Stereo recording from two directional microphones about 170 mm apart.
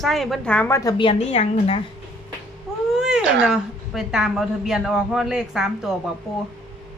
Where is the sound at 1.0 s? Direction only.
35° left (ahead or behind).